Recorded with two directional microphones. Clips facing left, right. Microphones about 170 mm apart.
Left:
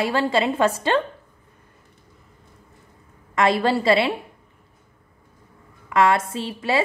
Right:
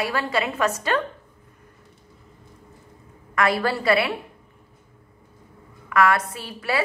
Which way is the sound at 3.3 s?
25° left (ahead or behind).